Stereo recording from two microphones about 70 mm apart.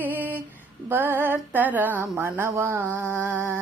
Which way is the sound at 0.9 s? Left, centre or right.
Right.